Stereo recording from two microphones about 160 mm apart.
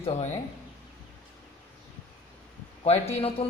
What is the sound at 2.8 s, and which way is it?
Speech, 40° left (ahead or behind).